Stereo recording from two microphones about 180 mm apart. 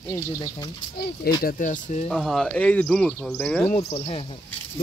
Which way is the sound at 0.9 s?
60° left (ahead or behind).